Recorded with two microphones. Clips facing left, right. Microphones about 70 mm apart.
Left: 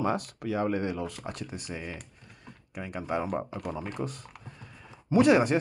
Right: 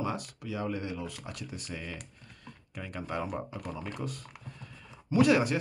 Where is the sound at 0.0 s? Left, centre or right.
Left.